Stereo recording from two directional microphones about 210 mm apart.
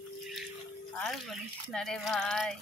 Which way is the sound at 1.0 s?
Centre (ahead or behind).